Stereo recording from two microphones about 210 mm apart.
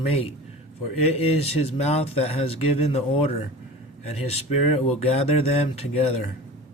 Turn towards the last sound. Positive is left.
turn(degrees=30)  # may be behind; listen again after turning